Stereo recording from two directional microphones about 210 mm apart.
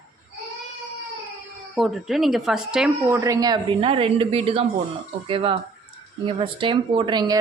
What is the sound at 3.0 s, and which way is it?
A woman's voice, 15° right (ahead or behind).